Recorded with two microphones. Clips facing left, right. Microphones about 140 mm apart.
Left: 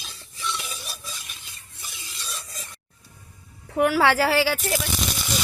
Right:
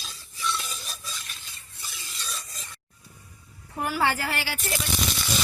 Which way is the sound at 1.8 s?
10° left (ahead or behind).